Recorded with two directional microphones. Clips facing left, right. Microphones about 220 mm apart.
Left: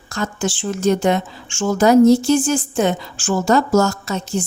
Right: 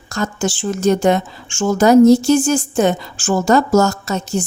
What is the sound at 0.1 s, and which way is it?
Speech, 45° right (ahead or behind).